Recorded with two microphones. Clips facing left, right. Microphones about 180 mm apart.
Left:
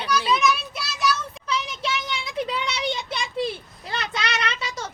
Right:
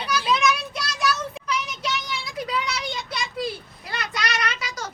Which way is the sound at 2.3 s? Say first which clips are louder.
Left 1 dB; 25° left (ahead or behind).